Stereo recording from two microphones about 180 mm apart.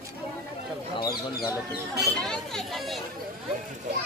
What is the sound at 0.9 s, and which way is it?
Bird, 25° left (ahead or behind).